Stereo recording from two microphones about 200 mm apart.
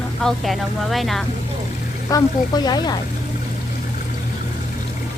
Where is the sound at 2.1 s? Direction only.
20° left (ahead or behind).